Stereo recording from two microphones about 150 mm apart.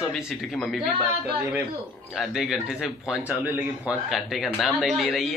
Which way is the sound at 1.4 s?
10° right (ahead or behind).